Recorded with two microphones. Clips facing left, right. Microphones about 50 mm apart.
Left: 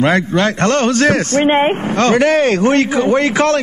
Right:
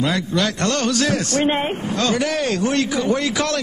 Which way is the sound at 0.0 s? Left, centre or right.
Left.